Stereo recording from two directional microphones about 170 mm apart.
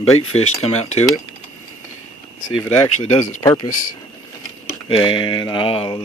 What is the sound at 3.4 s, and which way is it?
Speech, 30° left (ahead or behind).